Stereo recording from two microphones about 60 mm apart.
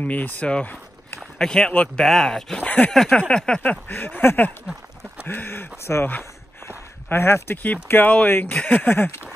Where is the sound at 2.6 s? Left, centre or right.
Left.